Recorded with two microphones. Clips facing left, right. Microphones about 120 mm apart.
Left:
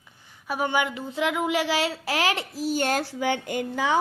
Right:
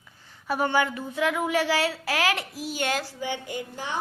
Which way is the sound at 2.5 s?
40° left (ahead or behind).